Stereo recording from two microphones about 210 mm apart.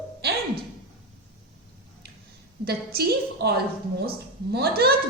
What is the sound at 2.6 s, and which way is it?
A woman's voice, 50° right (ahead or behind).